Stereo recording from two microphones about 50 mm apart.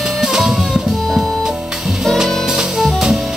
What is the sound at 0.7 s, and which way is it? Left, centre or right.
Music, centre.